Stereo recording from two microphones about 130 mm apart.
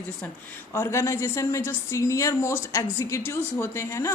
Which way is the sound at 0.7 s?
20° left (ahead or behind).